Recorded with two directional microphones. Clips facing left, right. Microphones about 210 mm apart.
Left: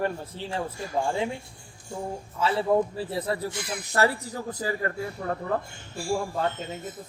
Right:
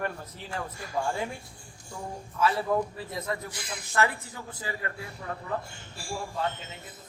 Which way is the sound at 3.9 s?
35° left (ahead or behind).